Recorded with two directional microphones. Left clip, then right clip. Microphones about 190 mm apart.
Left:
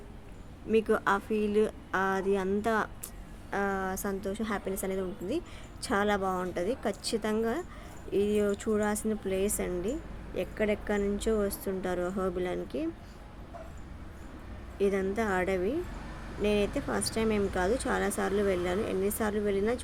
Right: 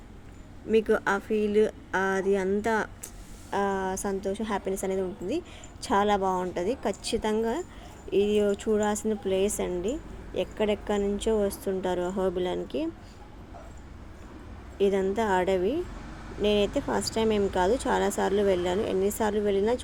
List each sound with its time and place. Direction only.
0.7 s a woman's voice: 5° right (ahead or behind)
14.8 s a woman's voice: 5° right (ahead or behind)